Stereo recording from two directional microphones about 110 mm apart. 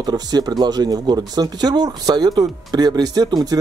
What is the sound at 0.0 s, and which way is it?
Speech, 40° right (ahead or behind).